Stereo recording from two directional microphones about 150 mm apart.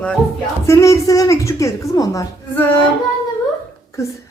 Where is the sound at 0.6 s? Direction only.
20° left (ahead or behind).